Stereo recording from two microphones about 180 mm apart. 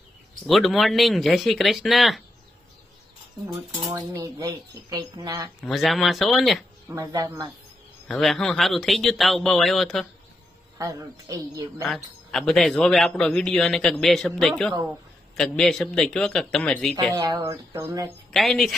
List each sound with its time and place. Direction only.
0.4 s a man's voice: centre (ahead or behind)
4.0 s speech: 20° right (ahead or behind)
5.6 s a man's voice: centre (ahead or behind)
6.9 s speech: 20° right (ahead or behind)
8.1 s a man's voice: centre (ahead or behind)
10.8 s speech: 20° right (ahead or behind)
11.8 s a man's voice: centre (ahead or behind)
16.9 s speech: 20° right (ahead or behind)
18.3 s a man's voice: centre (ahead or behind)